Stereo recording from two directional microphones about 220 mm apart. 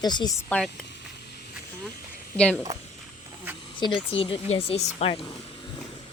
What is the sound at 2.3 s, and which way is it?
Speech, 5° left (ahead or behind).